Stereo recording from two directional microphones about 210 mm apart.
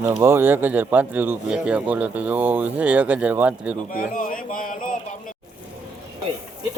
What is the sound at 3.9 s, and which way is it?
Speech, 40° left (ahead or behind).